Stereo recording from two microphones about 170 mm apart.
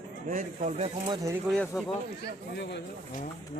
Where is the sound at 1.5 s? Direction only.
5° left (ahead or behind).